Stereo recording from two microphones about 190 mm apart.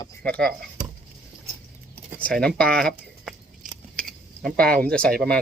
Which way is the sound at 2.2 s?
5° left (ahead or behind).